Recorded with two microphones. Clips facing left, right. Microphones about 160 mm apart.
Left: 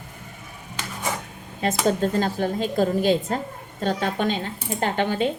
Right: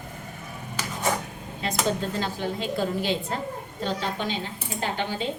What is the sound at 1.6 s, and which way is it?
A woman's voice, 50° left (ahead or behind).